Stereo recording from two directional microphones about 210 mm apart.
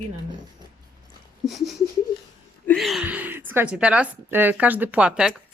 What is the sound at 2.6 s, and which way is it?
A woman's voice, centre (ahead or behind).